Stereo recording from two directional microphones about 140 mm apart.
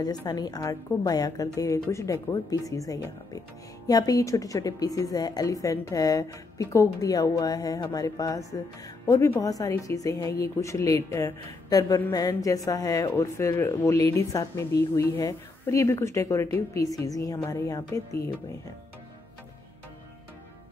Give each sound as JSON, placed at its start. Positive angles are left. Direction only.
{"t": 0.3, "sound": "a woman's voice", "side_deg": 30}